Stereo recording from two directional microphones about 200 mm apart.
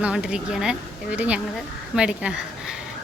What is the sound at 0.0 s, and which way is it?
A woman's voice, 5° right (ahead or behind).